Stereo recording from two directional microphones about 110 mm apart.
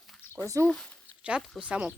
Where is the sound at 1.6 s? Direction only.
10° right (ahead or behind).